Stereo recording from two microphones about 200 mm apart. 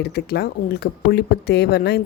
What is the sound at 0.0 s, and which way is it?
Speech, 55° left (ahead or behind).